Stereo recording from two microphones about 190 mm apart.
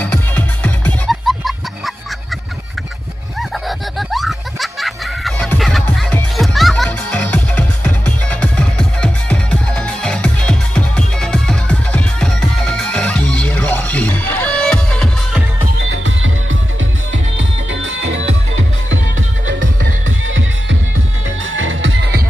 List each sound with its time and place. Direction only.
0.0 s music: 10° left (ahead or behind)
3.3 s snicker: centre (ahead or behind)
15.9 s music: 90° right
17.4 s music: 75° right (ahead or behind)
21.5 s music: 90° right